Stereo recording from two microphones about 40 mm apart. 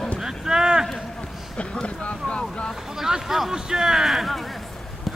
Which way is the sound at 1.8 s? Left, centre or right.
Left.